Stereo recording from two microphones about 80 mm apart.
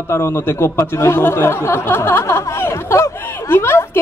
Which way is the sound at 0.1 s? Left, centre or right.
Left.